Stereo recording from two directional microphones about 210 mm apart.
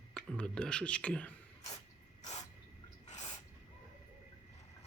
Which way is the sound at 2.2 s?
35° left (ahead or behind).